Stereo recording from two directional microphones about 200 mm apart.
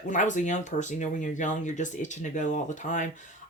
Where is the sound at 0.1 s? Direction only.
40° left (ahead or behind).